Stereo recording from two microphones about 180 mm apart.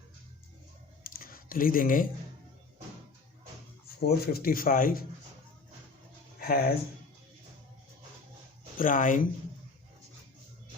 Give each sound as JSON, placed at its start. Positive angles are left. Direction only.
{"t": 1.0, "sound": "a sound", "side_deg": 55}
{"t": 4.0, "sound": "speech", "side_deg": 60}
{"t": 6.4, "sound": "speech", "side_deg": 55}
{"t": 8.8, "sound": "speech", "side_deg": 45}